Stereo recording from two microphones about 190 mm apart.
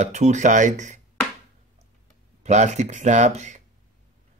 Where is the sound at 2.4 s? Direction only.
35° right (ahead or behind).